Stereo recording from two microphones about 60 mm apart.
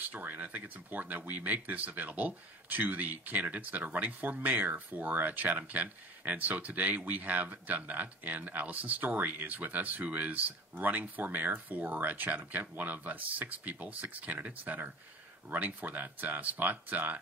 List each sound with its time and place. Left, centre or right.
0.0 s speech: right